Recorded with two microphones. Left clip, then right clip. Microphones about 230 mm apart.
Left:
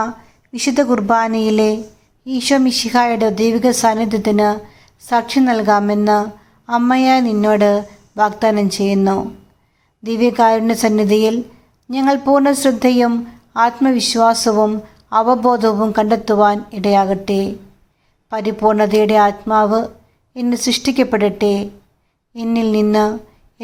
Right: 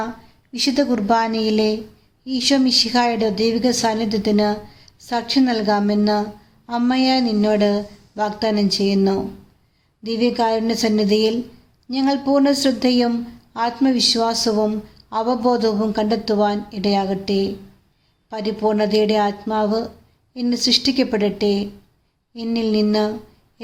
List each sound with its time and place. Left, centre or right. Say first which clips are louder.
0.5 s a woman's voice: left 4 dB; centre